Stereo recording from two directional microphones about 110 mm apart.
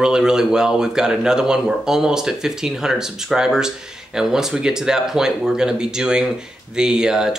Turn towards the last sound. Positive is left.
turn(degrees=-5)  # may be behind; listen again after turning